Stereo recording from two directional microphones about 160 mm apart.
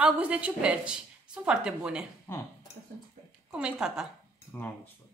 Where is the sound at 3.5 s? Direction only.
5° right (ahead or behind).